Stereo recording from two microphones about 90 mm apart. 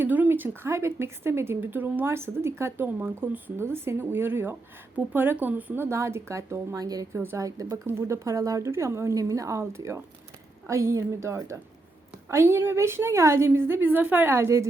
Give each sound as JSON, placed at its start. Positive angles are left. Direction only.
{"t": 0.0, "sound": "a woman's voice", "side_deg": -20}
{"t": 7.2, "sound": "speech", "side_deg": -25}
{"t": 7.4, "sound": "a woman's voice", "side_deg": -40}